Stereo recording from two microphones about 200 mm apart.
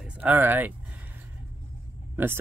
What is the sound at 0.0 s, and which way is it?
Speech, 5° right (ahead or behind).